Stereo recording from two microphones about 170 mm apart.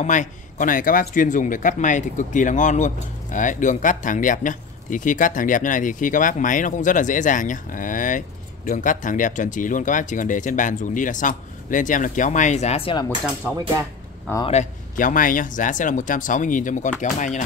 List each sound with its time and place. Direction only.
0.0 s speech: 45° left (ahead or behind)
14.5 s speech: 45° left (ahead or behind)